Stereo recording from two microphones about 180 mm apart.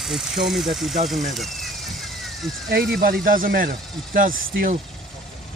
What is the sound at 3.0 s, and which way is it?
Speech, 55° right (ahead or behind).